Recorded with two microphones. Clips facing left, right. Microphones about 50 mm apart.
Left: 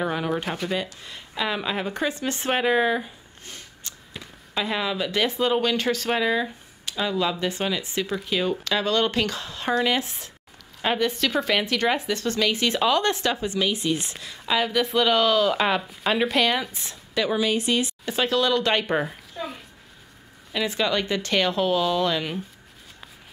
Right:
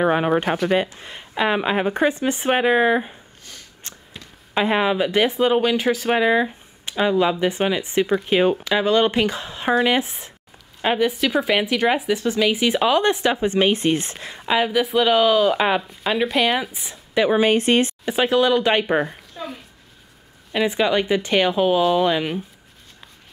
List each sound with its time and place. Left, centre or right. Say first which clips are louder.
0.0 s speech: right 7 dB; right
2.3 s speech: right 4 dB; centre
3.9 s a sound: right 3 dB; right
4.6 s speech: right 7 dB; right
8.6 s speech: right 5 dB; centre
10.8 s a woman's voice: right 4 dB; centre
13.5 s speech: right 6 dB; right
14.5 s a woman's voice: right 4 dB; centre
15.8 s a woman's voice: right 2 dB; centre; by 17.4 s right
17.4 s speech: right 6 dB; right
18.0 s a woman's voice: right 2 dB; centre
18.9 s a sound: right 3 dB; centre
20.5 s a woman's voice: right 5 dB; centre